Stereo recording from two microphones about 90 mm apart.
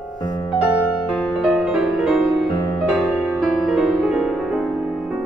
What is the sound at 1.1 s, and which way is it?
Music, 5° left (ahead or behind).